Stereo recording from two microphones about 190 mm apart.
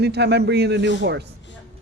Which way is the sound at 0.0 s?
60° right (ahead or behind).